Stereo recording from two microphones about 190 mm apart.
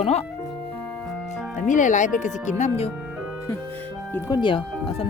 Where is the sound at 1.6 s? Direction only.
40° left (ahead or behind).